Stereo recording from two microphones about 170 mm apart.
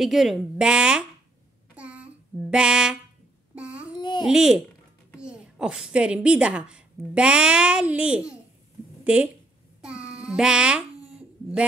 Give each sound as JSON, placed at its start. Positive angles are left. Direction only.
{"t": 0.0, "sound": "a woman's voice", "side_deg": 0}
{"t": 1.8, "sound": "child singing", "side_deg": -5}
{"t": 4.0, "sound": "babbling", "side_deg": 25}
{"t": 4.3, "sound": "a woman's voice", "side_deg": -5}
{"t": 9.8, "sound": "child singing", "side_deg": -5}
{"t": 11.1, "sound": "a sound", "side_deg": -5}